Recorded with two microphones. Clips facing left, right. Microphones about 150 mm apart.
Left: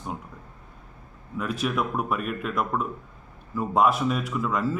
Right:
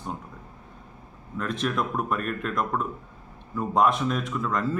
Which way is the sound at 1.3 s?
5° left (ahead or behind).